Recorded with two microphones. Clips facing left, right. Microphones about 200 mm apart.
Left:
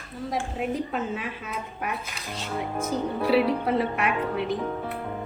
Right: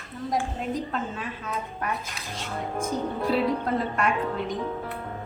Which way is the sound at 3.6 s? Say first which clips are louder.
Left 1 dB; 5° left (ahead or behind).